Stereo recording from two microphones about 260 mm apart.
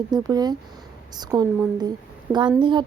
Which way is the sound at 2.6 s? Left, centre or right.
Centre.